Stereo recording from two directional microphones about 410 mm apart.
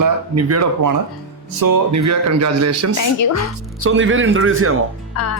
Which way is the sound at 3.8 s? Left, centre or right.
Right.